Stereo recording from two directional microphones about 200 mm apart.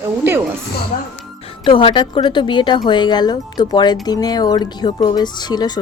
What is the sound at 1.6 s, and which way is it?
Speech, 25° left (ahead or behind).